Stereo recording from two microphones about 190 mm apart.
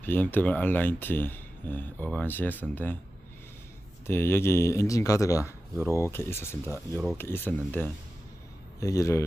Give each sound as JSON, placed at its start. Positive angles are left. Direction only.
{"t": 0.0, "sound": "speech", "side_deg": 10}
{"t": 4.0, "sound": "speech", "side_deg": 15}